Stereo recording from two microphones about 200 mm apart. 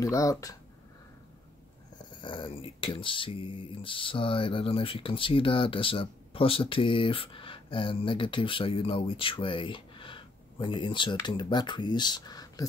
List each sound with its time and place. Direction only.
0.0 s speech: 15° left (ahead or behind)
2.2 s speech: 25° left (ahead or behind)